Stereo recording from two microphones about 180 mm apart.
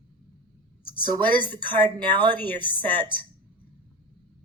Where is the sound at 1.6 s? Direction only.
10° left (ahead or behind).